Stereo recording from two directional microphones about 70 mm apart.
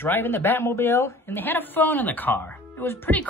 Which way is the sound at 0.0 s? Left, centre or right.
Left.